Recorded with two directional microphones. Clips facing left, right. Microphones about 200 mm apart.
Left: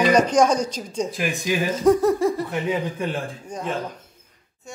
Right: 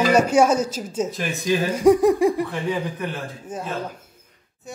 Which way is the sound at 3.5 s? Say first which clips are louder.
Right 2 dB; 5° right (ahead or behind).